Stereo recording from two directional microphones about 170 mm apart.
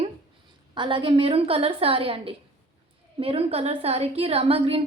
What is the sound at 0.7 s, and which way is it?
A woman's voice, 30° right (ahead or behind).